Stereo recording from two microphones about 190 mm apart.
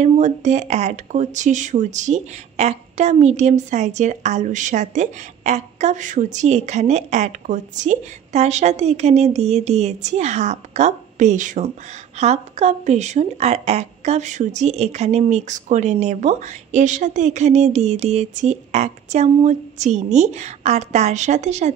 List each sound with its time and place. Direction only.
0.0 s speech: 40° right (ahead or behind)